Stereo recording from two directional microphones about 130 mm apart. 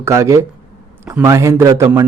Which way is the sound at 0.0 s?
20° right (ahead or behind).